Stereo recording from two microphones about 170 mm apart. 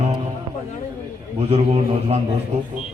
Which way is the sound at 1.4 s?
40° right (ahead or behind).